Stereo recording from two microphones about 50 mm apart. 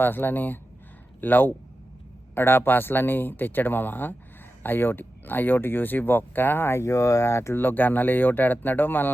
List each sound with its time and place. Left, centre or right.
0.0 s speech: left
7.5 s speech: left